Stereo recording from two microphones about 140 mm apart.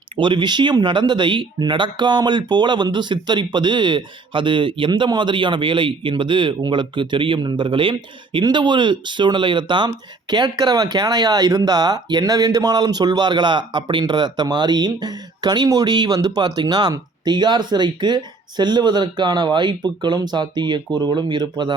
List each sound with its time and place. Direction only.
0.2 s speech: 35° right (ahead or behind)